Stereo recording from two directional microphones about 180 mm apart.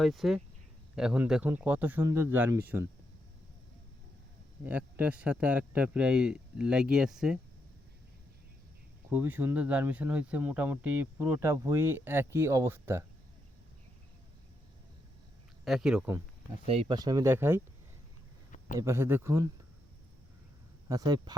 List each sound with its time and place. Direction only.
0.0 s speech: centre (ahead or behind)
4.6 s speech: 10° right (ahead or behind)
9.0 s speech: 10° right (ahead or behind)
15.6 s speech: centre (ahead or behind)
16.6 s speech: 30° right (ahead or behind); by 17.6 s 10° right (ahead or behind)
18.8 s speech: 15° right (ahead or behind)
20.8 s speech: 20° right (ahead or behind)